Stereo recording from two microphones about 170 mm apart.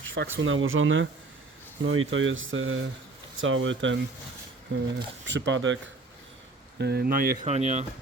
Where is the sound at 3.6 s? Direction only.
90° right.